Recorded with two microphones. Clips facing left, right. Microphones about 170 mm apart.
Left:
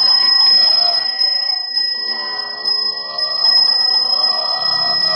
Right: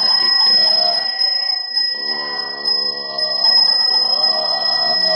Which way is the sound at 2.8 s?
50° right (ahead or behind).